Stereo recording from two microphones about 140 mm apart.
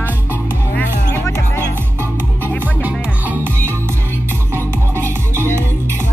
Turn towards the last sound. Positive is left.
turn(degrees=-20)  # may be behind; listen again after turning